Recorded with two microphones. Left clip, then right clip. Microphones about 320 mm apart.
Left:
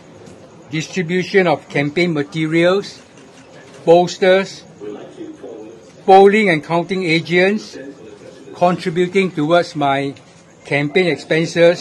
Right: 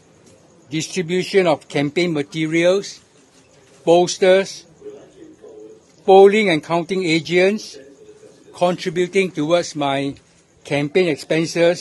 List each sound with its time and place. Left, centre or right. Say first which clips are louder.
0.7 s speech: left 1 dB; right
6.0 s speech: left 2 dB; right